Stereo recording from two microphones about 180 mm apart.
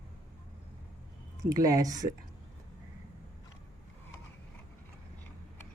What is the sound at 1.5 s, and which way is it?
Speech, 20° right (ahead or behind).